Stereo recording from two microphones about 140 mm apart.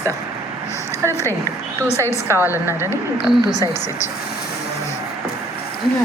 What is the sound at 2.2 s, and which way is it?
Speech, 15° right (ahead or behind).